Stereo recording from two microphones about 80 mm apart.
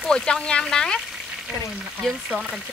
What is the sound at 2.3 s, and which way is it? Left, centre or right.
Speech, centre.